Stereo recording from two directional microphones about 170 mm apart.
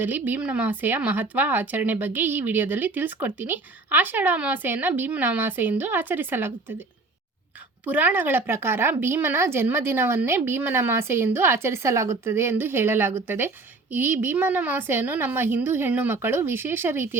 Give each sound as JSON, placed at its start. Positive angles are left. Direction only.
{"t": 0.0, "sound": "a woman's voice", "side_deg": -10}
{"t": 7.9, "sound": "a woman's voice", "side_deg": -10}